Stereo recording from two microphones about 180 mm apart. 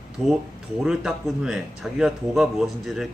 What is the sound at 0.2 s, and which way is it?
Mantra, 5° left (ahead or behind).